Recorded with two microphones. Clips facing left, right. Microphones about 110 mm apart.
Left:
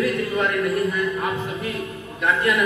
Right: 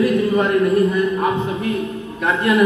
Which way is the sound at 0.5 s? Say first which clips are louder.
Right 7 dB; 35° right (ahead or behind).